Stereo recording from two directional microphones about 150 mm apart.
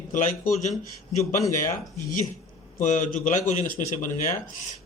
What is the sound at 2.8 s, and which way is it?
A man's voice, 55° left (ahead or behind).